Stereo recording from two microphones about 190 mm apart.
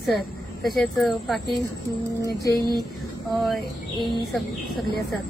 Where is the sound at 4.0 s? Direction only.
25° left (ahead or behind).